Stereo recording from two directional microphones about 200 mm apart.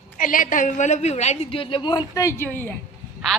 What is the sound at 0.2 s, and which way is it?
A woman's voice, 40° left (ahead or behind).